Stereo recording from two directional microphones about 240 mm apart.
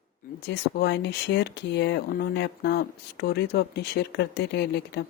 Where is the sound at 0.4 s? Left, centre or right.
Left.